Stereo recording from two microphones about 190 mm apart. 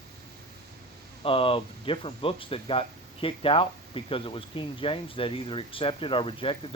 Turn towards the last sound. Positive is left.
turn(degrees=30)  # may be behind; listen again after turning